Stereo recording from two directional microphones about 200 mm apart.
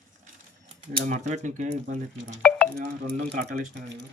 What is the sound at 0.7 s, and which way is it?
Speech, 35° right (ahead or behind).